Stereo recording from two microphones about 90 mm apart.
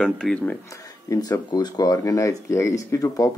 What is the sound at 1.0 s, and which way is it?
Speech, 45° left (ahead or behind).